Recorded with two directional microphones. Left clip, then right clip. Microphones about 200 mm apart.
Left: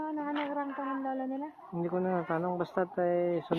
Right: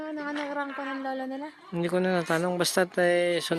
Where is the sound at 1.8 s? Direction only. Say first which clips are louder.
Right 5 dB; 30° right (ahead or behind).